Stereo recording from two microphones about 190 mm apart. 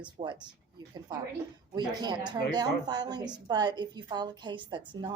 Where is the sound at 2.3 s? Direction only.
20° right (ahead or behind).